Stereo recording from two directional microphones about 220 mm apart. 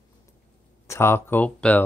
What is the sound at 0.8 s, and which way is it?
Speech, 10° left (ahead or behind).